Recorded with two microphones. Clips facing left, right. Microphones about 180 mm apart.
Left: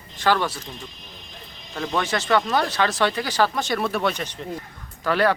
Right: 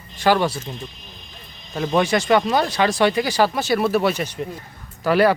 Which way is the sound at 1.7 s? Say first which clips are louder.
Right 6 dB; 20° right (ahead or behind).